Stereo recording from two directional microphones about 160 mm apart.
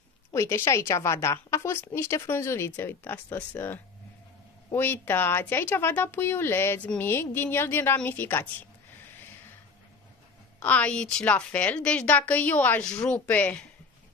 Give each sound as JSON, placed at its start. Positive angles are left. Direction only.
{"t": 0.3, "sound": "a woman's voice", "side_deg": 15}
{"t": 10.6, "sound": "a woman's voice", "side_deg": 10}